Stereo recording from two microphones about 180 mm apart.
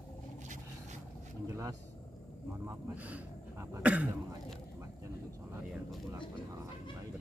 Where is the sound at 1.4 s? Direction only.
15° right (ahead or behind).